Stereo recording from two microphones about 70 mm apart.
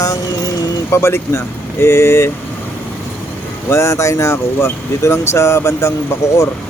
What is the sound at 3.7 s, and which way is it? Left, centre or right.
Speech, left.